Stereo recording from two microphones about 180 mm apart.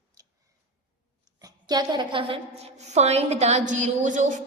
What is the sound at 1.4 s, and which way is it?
A woman's voice, 20° right (ahead or behind).